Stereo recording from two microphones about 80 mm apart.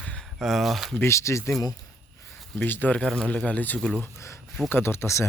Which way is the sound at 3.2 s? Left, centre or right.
Centre.